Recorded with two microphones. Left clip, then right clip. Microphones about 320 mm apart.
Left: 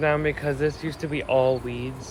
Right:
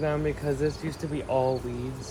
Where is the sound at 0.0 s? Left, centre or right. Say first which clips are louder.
Left 5 dB; centre.